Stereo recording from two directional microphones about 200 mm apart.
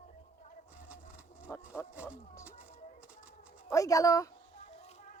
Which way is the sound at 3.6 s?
15° left (ahead or behind).